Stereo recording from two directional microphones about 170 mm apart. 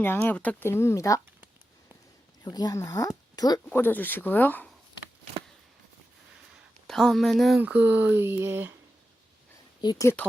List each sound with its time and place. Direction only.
0.0 s speech: 10° left (ahead or behind)
2.4 s speech: 25° left (ahead or behind)
3.7 s speech: 10° left (ahead or behind)
6.8 s speech: centre (ahead or behind)
7.6 s speech: 10° right (ahead or behind)
9.8 s speech: 20° left (ahead or behind)